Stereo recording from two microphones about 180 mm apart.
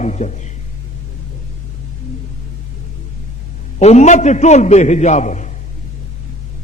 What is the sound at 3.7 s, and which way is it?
A man's voice, 40° left (ahead or behind).